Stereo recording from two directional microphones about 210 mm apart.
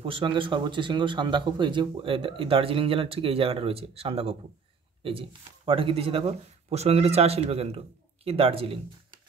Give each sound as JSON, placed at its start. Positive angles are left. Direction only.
{"t": 0.0, "sound": "a man's voice", "side_deg": -25}